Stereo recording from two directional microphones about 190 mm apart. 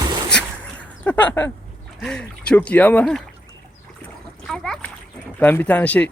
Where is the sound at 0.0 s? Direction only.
25° right (ahead or behind).